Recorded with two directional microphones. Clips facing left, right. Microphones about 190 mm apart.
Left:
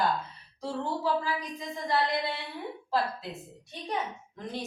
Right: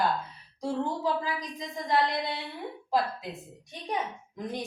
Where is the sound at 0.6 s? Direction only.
15° right (ahead or behind).